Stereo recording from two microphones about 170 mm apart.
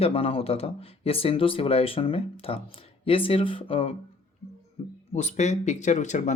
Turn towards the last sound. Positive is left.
turn(degrees=45)  # may be behind; listen again after turning